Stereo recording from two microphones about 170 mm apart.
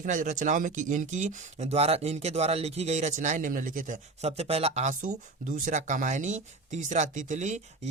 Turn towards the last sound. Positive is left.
turn(degrees=-45)  # may be behind; listen again after turning